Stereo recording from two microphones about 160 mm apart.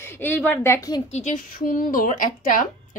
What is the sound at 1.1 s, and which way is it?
Speech, 50° left (ahead or behind).